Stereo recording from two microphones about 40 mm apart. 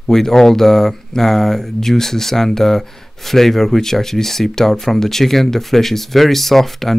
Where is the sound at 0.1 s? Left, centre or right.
Centre.